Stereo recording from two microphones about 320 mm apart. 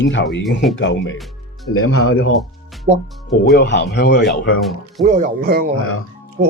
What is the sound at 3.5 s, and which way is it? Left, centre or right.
Speech, left.